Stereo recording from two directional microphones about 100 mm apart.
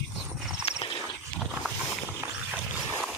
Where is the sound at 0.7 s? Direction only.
75° left (ahead or behind).